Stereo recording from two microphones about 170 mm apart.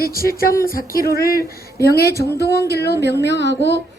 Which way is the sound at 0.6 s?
60° left (ahead or behind).